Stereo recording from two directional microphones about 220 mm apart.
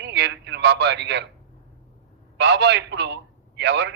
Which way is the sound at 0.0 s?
50° right (ahead or behind).